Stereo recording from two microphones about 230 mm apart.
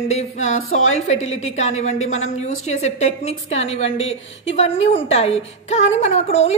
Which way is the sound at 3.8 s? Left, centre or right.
Left.